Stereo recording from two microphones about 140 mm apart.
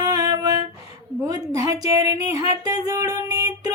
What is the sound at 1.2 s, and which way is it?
Speech, 25° right (ahead or behind).